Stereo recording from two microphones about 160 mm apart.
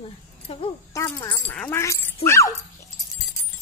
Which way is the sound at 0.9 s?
20° left (ahead or behind).